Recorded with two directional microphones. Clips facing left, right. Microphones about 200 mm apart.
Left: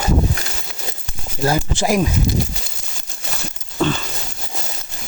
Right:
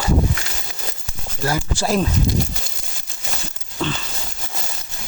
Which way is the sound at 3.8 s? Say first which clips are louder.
Left 6 dB; 45° left (ahead or behind).